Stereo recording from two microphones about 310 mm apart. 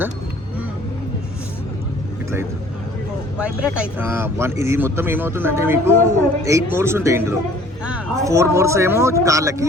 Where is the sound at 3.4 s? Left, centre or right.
Centre.